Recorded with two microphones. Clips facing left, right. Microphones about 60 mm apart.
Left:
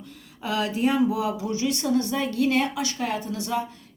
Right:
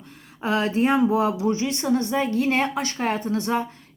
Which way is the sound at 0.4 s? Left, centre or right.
Right.